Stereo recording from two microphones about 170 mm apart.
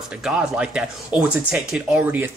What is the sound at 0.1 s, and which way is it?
Speech, 5° right (ahead or behind).